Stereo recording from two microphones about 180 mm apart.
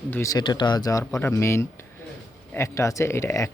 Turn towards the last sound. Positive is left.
turn(degrees=15)  # may be behind; listen again after turning